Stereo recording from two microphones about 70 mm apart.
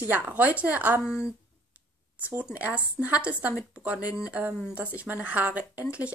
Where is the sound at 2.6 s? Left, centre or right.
Right.